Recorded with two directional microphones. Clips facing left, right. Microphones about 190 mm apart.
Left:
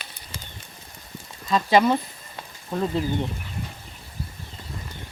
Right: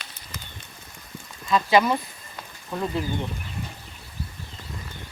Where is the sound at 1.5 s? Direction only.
30° left (ahead or behind).